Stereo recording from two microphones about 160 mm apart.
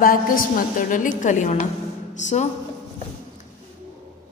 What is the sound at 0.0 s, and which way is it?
A woman's voice, 60° left (ahead or behind).